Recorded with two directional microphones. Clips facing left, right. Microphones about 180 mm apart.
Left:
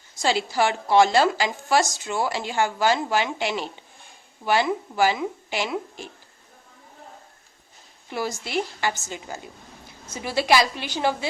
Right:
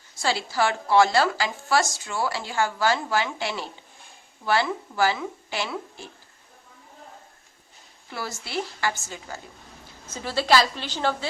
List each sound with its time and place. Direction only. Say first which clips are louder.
0.2 s a woman's voice: left 2 dB; 20° left (ahead or behind)
8.1 s a woman's voice: left 4 dB; 15° left (ahead or behind)